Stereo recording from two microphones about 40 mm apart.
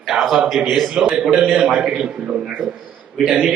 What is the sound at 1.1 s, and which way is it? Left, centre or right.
A man's voice, right.